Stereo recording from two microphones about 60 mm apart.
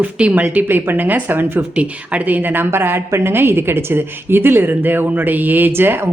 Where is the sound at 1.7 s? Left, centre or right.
Right.